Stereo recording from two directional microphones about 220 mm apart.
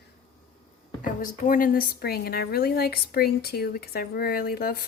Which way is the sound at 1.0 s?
40° left (ahead or behind).